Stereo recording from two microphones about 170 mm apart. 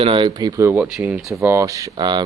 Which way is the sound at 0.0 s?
30° right (ahead or behind).